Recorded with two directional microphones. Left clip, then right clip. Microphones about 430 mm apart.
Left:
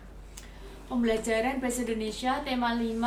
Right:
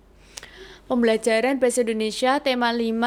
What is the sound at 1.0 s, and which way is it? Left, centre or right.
A woman's voice, right.